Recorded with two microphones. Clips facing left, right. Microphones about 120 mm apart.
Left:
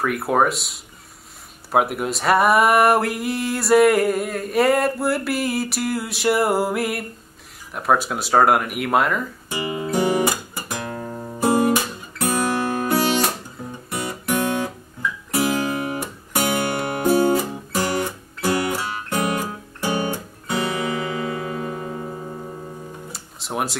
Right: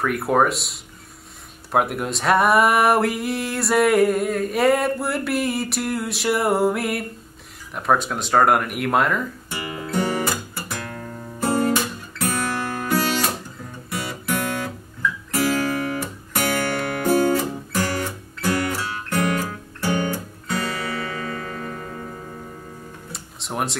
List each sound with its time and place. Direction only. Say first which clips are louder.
0.0 s speech: even; centre (ahead or behind)
9.5 s guitar: left 7 dB; 15° left (ahead or behind)
23.1 s music: left 1 dB; centre (ahead or behind)